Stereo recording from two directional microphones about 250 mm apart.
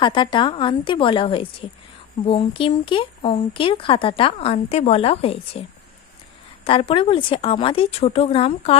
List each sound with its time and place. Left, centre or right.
0.0 s speech: centre
6.7 s speech: left